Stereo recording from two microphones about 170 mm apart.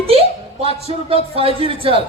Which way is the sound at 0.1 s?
35° right (ahead or behind).